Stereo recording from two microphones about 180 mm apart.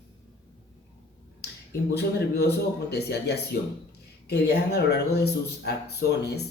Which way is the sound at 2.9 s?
65° left (ahead or behind).